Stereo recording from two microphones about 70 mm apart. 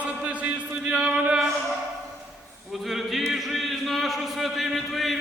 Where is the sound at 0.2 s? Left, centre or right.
Centre.